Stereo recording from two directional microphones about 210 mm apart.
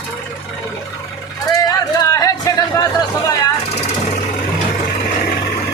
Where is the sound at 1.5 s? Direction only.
15° left (ahead or behind).